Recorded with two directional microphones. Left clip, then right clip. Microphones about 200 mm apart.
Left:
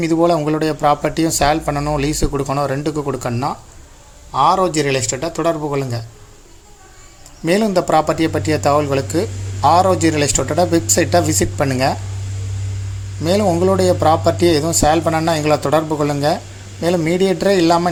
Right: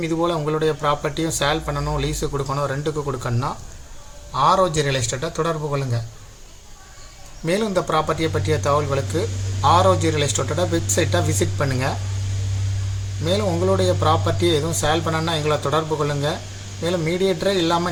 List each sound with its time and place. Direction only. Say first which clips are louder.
0.0 s speech: left 7 dB; 45° left (ahead or behind)
7.4 s speech: left 5 dB; 45° left (ahead or behind)
13.2 s speech: left 6 dB; 45° left (ahead or behind)